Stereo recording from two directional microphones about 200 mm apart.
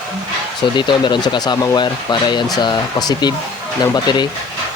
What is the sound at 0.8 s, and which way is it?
Speech, 25° left (ahead or behind).